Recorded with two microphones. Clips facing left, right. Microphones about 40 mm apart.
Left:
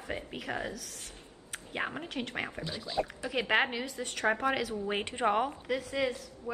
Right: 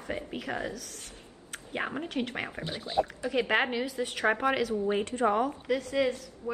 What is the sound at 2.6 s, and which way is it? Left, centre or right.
Speech, right.